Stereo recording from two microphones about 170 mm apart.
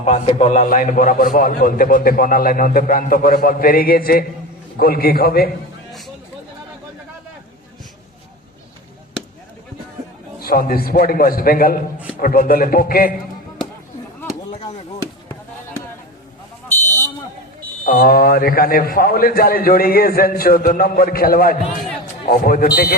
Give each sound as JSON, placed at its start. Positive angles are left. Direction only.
{"t": 0.0, "sound": "a man's voice", "side_deg": 40}
{"t": 10.4, "sound": "a man's voice", "side_deg": 60}
{"t": 17.8, "sound": "a man's voice", "side_deg": 55}